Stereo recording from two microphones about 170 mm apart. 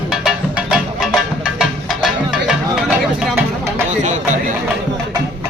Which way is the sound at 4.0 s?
45° right (ahead or behind).